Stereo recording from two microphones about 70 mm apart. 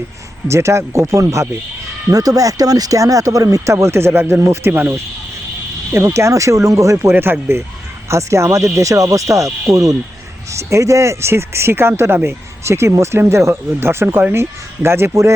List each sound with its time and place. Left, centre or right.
0.4 s speech: right
2.1 s speech: right
7.0 s speech: right
8.1 s speech: right